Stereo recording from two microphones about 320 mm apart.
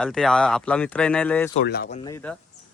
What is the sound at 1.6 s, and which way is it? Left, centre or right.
Speech, left.